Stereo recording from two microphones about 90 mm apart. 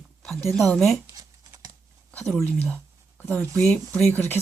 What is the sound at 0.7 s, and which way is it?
Speech, 5° left (ahead or behind).